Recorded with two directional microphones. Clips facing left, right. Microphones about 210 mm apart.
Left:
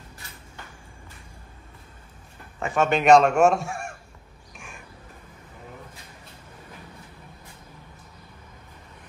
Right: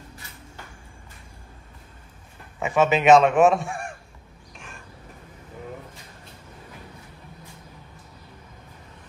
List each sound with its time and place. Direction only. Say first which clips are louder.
2.6 s a man's voice: right 2 dB; 5° right (ahead or behind)
4.6 s crow: even; 10° left (ahead or behind)